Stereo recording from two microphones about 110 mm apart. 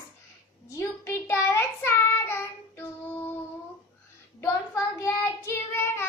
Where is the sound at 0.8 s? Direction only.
25° left (ahead or behind).